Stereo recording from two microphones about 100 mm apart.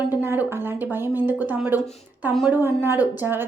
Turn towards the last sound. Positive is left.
turn(degrees=-20)  # may be behind; listen again after turning